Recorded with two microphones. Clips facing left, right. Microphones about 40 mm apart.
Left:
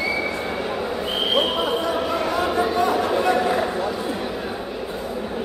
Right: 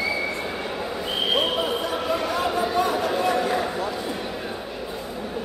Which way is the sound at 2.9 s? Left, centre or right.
Left.